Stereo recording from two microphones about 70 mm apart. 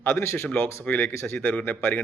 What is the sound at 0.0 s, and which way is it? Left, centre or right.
Speech, left.